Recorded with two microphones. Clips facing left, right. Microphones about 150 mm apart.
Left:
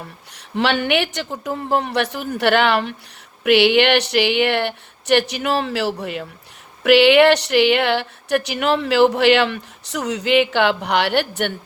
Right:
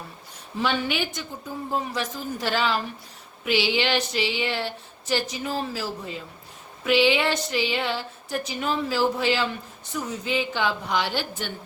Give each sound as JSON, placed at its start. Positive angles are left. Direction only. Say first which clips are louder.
{"t": 0.3, "sound": "speech", "louder": "left 6 dB", "side_deg": 75}